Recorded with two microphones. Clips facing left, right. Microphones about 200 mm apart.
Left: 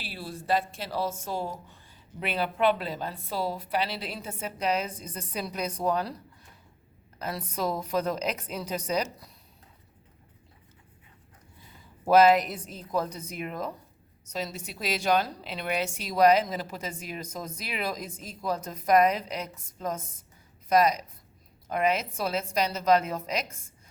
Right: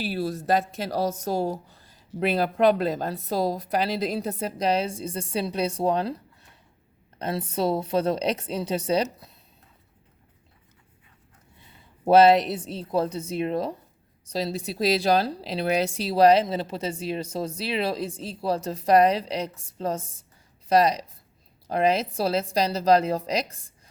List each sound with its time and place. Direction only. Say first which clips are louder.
0.0 s speech: right 11 dB; 45° right (ahead or behind); by 6.1 s 30° right (ahead or behind)
7.2 s a woman's voice: right 5 dB; 30° right (ahead or behind)
12.0 s a woman's voice: right 3 dB; 30° right (ahead or behind)